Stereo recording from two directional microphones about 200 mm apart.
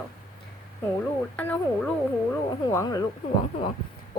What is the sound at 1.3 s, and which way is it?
Speech, 5° left (ahead or behind).